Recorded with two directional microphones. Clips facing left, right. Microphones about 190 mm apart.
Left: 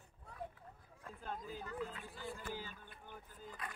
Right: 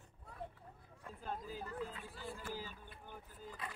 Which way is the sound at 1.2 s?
5° right (ahead or behind).